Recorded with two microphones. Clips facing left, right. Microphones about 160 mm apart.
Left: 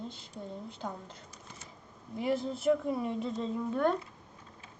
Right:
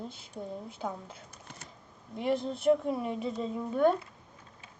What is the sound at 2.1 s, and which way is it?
Speech, centre (ahead or behind).